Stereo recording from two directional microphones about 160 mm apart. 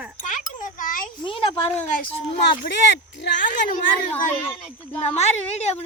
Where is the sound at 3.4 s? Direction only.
55° left (ahead or behind).